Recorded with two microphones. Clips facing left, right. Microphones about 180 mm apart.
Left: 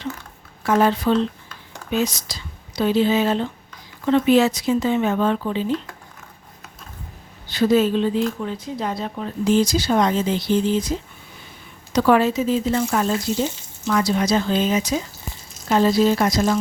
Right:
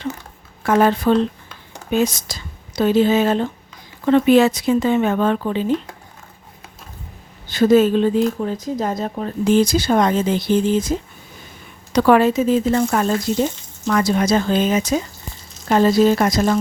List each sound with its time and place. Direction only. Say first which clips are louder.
0.6 s speech: right 2 dB; 55° right (ahead or behind)
7.4 s speech: right 4 dB; 45° right (ahead or behind)
11.9 s speech: right 3 dB; 60° right (ahead or behind)